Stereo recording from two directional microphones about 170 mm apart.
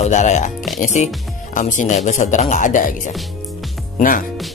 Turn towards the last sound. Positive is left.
turn(degrees=55)  # may be behind; listen again after turning